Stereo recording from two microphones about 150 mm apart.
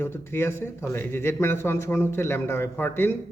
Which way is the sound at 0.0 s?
15° left (ahead or behind).